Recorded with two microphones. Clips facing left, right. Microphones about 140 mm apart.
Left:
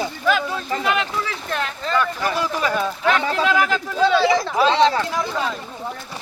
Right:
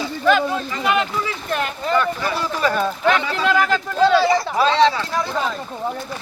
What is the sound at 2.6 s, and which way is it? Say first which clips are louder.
Speech: right 4 dB; centre (ahead or behind).